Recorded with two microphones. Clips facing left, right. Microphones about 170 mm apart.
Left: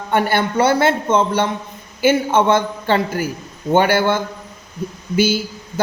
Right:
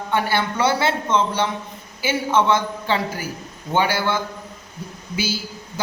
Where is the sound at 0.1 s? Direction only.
55° left (ahead or behind).